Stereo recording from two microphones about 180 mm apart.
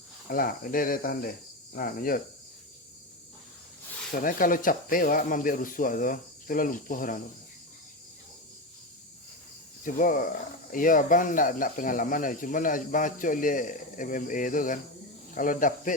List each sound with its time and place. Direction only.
0.3 s speech: 50° left (ahead or behind)
4.2 s speech: 50° left (ahead or behind)
9.8 s speech: 50° left (ahead or behind)